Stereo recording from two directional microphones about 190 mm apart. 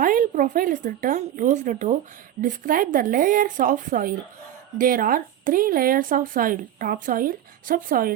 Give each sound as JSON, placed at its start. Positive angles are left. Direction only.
{"t": 0.0, "sound": "speech", "side_deg": -45}